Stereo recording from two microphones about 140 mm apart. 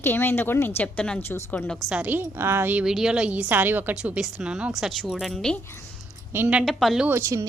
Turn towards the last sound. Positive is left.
turn(degrees=-20)  # may be behind; listen again after turning